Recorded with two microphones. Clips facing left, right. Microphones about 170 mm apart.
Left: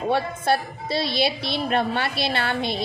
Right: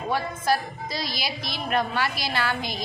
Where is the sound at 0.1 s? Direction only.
30° left (ahead or behind).